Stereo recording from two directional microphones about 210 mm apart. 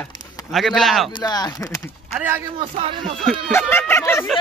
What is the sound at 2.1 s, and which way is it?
Speech, 10° right (ahead or behind).